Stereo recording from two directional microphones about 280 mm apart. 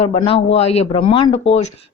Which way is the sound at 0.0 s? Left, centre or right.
Centre.